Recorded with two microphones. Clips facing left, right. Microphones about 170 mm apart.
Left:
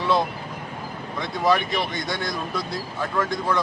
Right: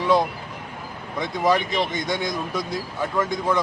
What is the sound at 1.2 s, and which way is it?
Speech, 20° right (ahead or behind).